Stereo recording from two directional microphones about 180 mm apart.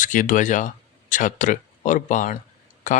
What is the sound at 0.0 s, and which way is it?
Speech, 45° left (ahead or behind).